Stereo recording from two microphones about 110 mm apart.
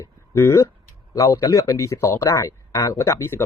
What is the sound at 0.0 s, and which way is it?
Speech, 25° left (ahead or behind).